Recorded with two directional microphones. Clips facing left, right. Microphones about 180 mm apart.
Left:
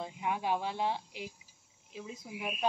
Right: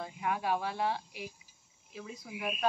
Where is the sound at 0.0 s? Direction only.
20° left (ahead or behind).